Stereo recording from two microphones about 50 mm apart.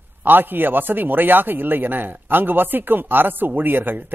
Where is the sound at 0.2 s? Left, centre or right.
Right.